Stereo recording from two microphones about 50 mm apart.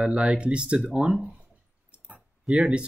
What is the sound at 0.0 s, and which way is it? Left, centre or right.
Speech, centre.